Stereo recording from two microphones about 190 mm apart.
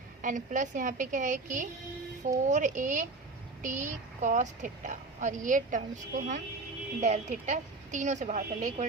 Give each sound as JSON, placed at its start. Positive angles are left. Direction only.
{"t": 0.2, "sound": "a woman's voice", "side_deg": -45}